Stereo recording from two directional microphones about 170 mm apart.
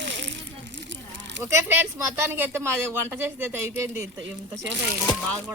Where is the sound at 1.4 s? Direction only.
15° right (ahead or behind).